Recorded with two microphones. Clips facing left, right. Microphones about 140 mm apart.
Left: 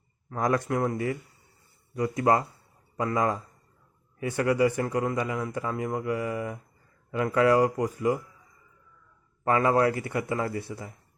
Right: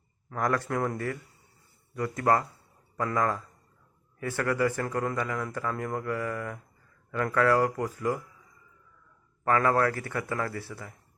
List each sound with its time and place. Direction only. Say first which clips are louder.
0.3 s speech: left 2 dB; 20° left (ahead or behind)
0.8 s speech: left 2 dB; 5° left (ahead or behind)
1.9 s speech: left 2 dB; 15° left (ahead or behind)
9.4 s speech: left 2 dB; 20° left (ahead or behind)